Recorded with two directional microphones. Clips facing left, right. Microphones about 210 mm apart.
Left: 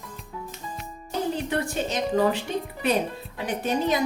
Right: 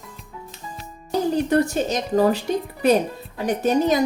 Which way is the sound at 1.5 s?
40° right (ahead or behind).